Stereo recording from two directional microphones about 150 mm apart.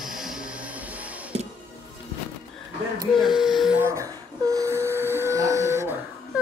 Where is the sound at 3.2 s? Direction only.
Centre (ahead or behind).